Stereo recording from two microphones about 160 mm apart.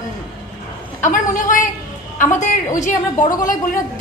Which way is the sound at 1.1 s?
55° left (ahead or behind).